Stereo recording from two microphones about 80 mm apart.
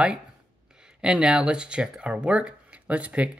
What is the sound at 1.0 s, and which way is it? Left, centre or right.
Speech, centre.